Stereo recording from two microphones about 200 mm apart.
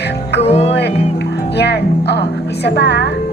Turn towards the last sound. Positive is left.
turn(degrees=55)  # may be behind; listen again after turning